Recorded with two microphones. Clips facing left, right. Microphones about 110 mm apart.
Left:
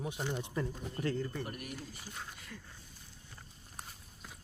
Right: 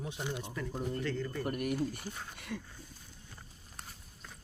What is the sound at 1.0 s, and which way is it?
Speech, 40° left (ahead or behind).